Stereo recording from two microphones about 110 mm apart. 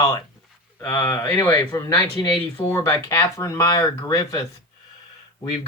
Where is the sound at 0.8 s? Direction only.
20° left (ahead or behind).